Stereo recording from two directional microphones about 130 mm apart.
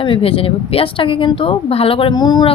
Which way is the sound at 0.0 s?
45° left (ahead or behind).